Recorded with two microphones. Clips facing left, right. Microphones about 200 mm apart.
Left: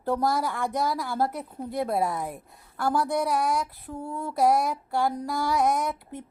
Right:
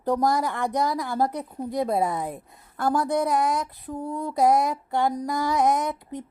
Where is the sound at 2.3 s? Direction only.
20° right (ahead or behind).